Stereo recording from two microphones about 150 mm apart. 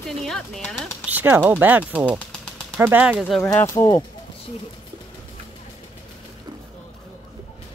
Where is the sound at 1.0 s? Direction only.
10° right (ahead or behind).